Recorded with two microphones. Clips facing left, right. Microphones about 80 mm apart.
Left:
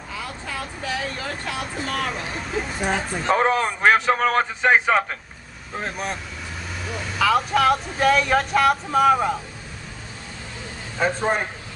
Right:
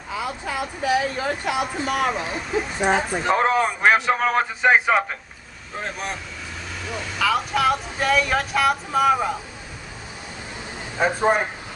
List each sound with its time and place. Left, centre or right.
0.1 s speech: centre
2.8 s speech: centre
11.0 s speech: centre